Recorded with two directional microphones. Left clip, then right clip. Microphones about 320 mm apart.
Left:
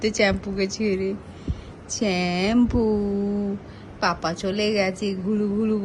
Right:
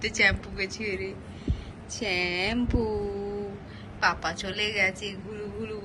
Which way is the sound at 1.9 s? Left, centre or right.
Left.